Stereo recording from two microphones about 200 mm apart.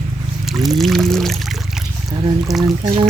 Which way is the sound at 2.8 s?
25° right (ahead or behind).